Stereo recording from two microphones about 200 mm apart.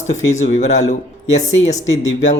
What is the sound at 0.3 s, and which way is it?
Speech, 35° left (ahead or behind).